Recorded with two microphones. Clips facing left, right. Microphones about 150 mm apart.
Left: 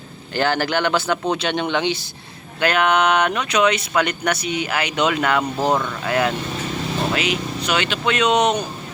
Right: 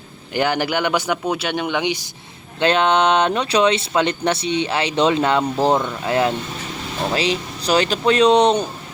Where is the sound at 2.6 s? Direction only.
25° right (ahead or behind).